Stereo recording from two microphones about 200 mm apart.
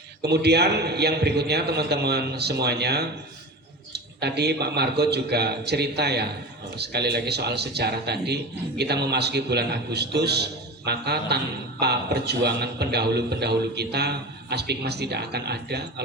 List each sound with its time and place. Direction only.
0.2 s a man's voice: 55° right (ahead or behind)